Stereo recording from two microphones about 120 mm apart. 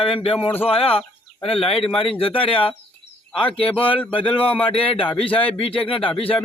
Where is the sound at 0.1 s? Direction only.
50° left (ahead or behind).